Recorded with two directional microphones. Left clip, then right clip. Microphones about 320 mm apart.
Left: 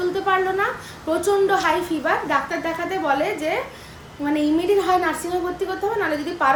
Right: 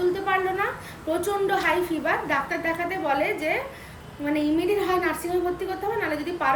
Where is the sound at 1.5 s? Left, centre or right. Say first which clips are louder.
Left 3 dB; centre.